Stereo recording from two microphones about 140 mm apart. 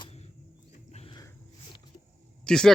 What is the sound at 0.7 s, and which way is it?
Wild animals, 50° left (ahead or behind).